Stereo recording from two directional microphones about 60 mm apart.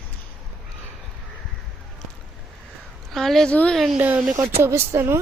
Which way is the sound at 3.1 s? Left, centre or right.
Centre.